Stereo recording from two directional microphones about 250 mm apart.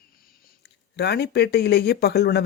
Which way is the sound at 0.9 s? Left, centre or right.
Left.